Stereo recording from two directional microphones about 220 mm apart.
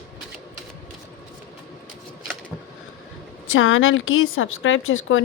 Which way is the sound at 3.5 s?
65° left (ahead or behind).